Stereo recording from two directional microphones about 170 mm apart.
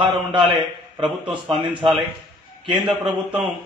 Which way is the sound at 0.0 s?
30° right (ahead or behind).